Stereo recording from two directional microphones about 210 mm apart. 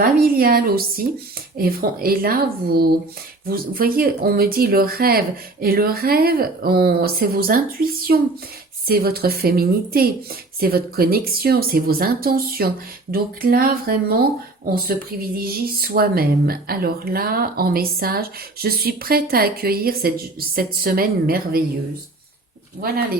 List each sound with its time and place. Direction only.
0.0 s speech: 45° right (ahead or behind)
22.8 s speech: 45° right (ahead or behind)